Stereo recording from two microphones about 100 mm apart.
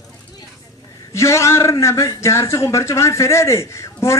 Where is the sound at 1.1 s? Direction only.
30° left (ahead or behind).